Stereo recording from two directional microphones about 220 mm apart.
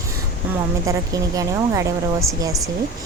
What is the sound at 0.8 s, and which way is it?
A woman's voice, 15° right (ahead or behind).